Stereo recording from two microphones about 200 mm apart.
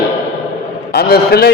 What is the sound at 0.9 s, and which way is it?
Speech, 50° left (ahead or behind).